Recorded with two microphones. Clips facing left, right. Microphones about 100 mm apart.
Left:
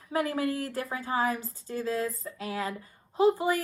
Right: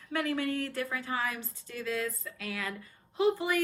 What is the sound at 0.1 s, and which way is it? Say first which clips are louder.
A woman's voice: left 3 dB; 30° left (ahead or behind).